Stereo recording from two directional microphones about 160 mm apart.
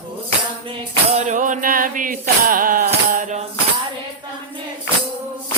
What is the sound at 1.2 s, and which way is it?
Music, 50° right (ahead or behind).